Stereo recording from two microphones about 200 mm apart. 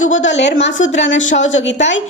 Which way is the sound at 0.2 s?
65° left (ahead or behind).